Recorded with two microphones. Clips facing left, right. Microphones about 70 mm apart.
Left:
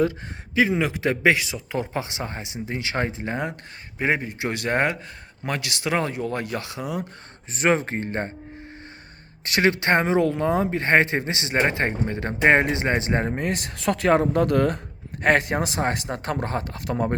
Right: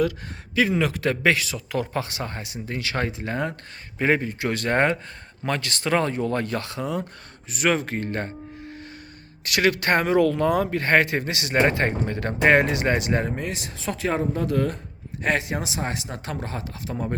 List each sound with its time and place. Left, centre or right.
0.5 s speech: centre
7.5 s speech: left
9.4 s speech: left
13.4 s speech: left